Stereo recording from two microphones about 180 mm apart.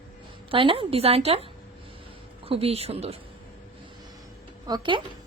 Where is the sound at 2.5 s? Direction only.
35° right (ahead or behind).